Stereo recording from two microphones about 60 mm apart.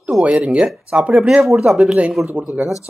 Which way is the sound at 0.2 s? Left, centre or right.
Right.